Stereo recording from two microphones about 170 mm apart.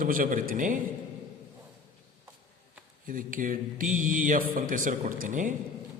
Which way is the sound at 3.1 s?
55° right (ahead or behind).